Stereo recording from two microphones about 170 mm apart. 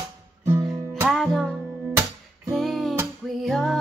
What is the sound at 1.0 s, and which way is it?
Music, centre (ahead or behind).